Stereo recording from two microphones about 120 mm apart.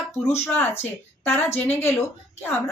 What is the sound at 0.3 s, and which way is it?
Speech, 20° left (ahead or behind).